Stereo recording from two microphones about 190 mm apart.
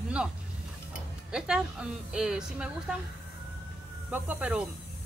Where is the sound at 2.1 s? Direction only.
5° right (ahead or behind).